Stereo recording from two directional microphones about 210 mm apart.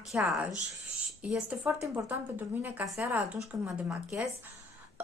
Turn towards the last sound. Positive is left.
turn(degrees=-10)  # may be behind; listen again after turning